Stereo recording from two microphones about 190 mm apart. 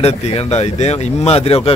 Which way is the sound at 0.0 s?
35° left (ahead or behind).